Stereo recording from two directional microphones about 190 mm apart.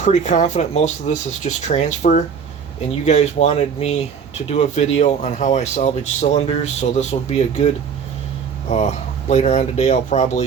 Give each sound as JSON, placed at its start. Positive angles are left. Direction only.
{"t": 0.0, "sound": "speech", "side_deg": 40}
{"t": 8.7, "sound": "speech", "side_deg": 35}